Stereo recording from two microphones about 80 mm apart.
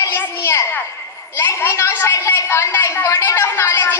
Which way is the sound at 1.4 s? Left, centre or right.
Left.